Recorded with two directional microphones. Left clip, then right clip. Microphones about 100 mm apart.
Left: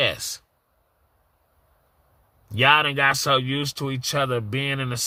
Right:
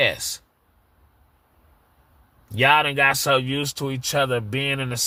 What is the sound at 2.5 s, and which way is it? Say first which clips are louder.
Speech: even; 20° left (ahead or behind).